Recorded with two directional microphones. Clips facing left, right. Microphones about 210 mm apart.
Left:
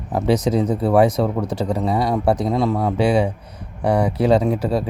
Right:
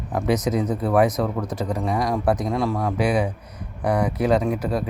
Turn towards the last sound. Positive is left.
turn(degrees=30)  # may be behind; listen again after turning